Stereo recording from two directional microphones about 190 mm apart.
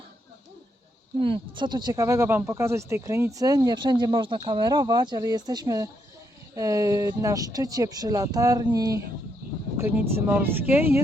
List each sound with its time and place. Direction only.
1.2 s speech: 25° right (ahead or behind); by 11.0 s 10° right (ahead or behind)